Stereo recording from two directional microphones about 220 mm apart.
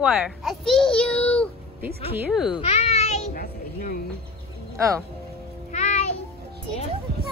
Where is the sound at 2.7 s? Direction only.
30° left (ahead or behind).